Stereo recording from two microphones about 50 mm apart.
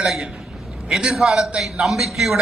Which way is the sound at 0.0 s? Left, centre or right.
Centre.